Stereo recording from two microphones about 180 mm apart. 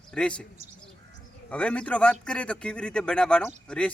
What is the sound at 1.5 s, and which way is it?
A man's voice, 5° left (ahead or behind).